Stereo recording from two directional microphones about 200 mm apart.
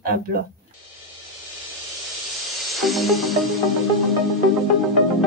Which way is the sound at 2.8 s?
Centre (ahead or behind).